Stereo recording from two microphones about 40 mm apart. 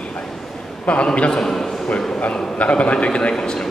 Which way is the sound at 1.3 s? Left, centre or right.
Centre.